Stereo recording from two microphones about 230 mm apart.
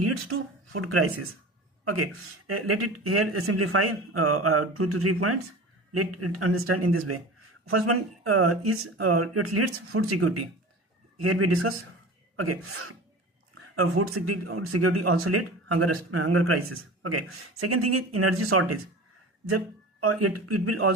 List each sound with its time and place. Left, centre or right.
0.0 s speech: right